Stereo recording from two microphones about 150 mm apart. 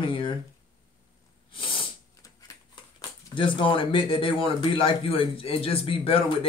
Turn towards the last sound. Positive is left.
turn(degrees=40)  # may be behind; listen again after turning